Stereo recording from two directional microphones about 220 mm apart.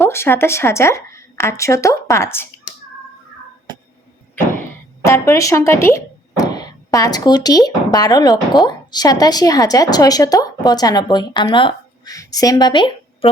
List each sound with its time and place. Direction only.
0.0 s a woman's voice: 10° left (ahead or behind)
5.0 s a woman's voice: 15° left (ahead or behind)